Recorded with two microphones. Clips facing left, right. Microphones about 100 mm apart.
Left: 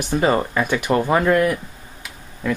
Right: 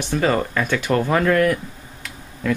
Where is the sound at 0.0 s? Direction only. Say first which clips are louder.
Left 1 dB; 15° left (ahead or behind).